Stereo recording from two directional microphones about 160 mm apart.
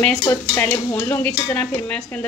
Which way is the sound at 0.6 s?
10° left (ahead or behind).